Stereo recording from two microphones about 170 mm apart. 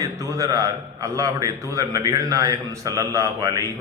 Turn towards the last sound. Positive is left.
turn(degrees=-20)  # may be behind; listen again after turning